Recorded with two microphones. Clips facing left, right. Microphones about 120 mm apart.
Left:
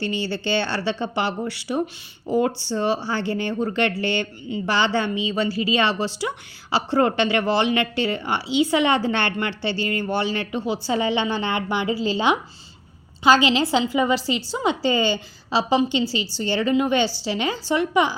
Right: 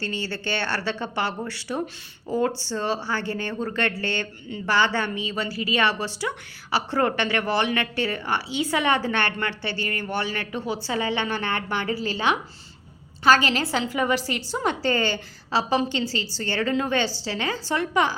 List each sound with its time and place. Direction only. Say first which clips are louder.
0.0 s a woman's voice: left 4 dB; 20° left (ahead or behind)